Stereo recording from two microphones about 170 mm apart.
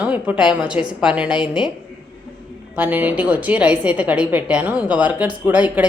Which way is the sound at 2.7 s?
10° right (ahead or behind).